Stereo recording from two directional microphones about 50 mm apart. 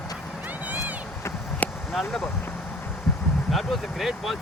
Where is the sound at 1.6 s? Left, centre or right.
Left.